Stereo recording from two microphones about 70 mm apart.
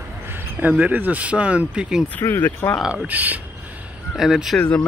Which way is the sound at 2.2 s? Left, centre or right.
Left.